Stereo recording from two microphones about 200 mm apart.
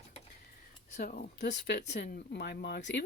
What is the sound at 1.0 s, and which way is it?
Speech, 45° left (ahead or behind).